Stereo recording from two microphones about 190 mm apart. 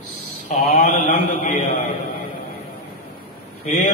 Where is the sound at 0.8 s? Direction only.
40° left (ahead or behind).